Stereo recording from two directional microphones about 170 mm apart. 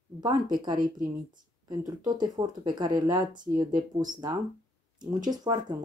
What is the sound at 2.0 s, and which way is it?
Speech, 25° right (ahead or behind).